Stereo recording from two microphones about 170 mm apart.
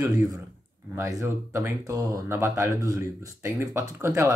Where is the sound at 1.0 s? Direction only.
15° right (ahead or behind).